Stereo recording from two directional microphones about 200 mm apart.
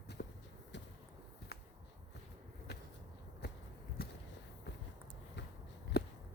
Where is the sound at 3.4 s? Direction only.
55° left (ahead or behind).